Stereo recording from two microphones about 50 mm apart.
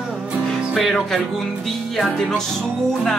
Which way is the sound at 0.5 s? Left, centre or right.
Centre.